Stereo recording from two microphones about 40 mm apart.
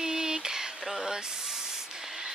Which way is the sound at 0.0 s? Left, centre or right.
Centre.